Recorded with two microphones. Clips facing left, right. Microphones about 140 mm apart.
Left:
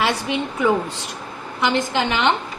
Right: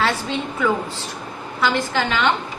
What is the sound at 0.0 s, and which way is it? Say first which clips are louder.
A woman's voice: left 1 dB; 20° left (ahead or behind).